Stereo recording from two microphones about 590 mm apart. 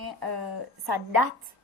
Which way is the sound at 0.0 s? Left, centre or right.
Right.